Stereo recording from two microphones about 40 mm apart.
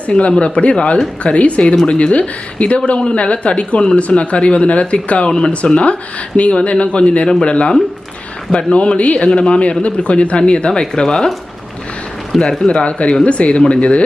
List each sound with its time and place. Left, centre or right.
0.1 s speech: left
5.3 s speech: centre
12.4 s speech: left